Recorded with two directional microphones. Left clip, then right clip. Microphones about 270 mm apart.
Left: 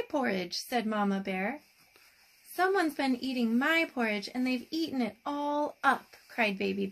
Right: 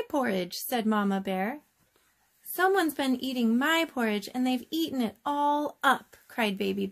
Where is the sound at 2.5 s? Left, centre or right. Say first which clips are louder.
Right 3 dB; right.